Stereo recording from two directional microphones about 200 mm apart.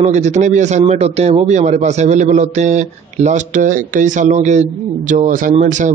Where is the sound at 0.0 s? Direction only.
35° right (ahead or behind).